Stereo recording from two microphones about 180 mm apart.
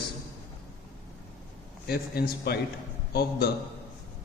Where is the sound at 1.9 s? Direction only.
60° left (ahead or behind).